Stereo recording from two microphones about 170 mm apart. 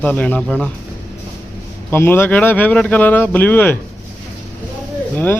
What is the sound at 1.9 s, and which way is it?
Speech, 15° left (ahead or behind).